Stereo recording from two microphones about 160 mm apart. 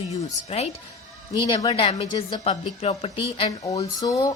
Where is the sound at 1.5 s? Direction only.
35° left (ahead or behind).